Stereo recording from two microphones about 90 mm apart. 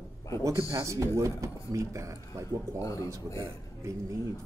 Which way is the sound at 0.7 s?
35° right (ahead or behind).